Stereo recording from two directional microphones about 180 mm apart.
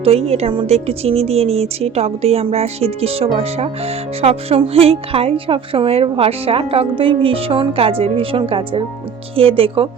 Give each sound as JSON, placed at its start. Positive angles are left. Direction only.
{"t": 0.0, "sound": "a woman's voice", "side_deg": -35}